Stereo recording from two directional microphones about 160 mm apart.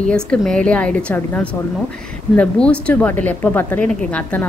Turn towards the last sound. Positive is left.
turn(degrees=10)  # may be behind; listen again after turning